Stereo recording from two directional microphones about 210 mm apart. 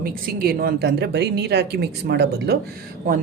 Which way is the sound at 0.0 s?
45° right (ahead or behind).